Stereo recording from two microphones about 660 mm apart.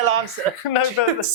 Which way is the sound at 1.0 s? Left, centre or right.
Left.